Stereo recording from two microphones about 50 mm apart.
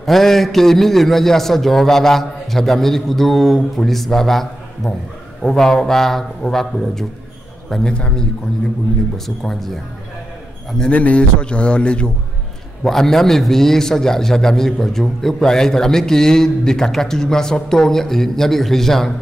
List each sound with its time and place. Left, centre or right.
0.0 s a man's voice: centre
9.1 s a man's voice: centre
10.9 s a man's voice: left
12.8 s a man's voice: centre